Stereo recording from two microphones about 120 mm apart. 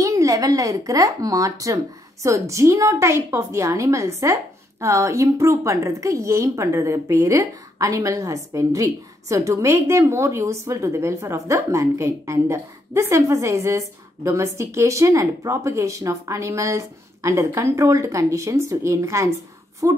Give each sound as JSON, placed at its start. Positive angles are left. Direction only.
{"t": 0.0, "sound": "a woman's voice", "side_deg": -25}